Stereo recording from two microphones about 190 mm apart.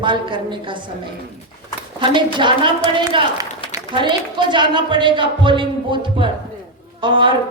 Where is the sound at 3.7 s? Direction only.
25° right (ahead or behind).